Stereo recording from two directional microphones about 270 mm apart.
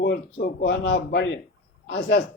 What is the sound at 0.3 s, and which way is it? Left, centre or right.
Speech, left.